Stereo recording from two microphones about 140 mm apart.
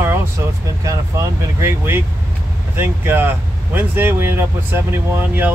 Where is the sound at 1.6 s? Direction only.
15° right (ahead or behind).